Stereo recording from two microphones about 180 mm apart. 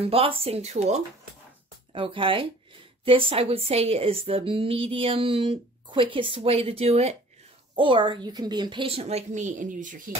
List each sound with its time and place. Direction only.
0.0 s a woman's voice: 30° right (ahead or behind); by 10.1 s 50° right (ahead or behind)